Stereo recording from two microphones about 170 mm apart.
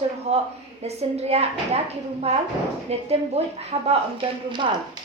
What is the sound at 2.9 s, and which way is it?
A woman's voice, 40° right (ahead or behind).